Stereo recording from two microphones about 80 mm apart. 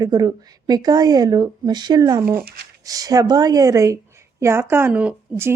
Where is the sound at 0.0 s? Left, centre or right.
Right.